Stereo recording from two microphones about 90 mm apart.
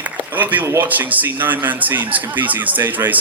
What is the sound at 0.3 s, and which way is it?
Speech, 20° right (ahead or behind).